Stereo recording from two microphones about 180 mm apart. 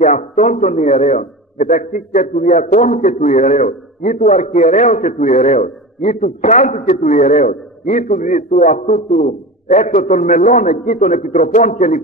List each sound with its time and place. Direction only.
0.0 s a man's voice: 40° left (ahead or behind)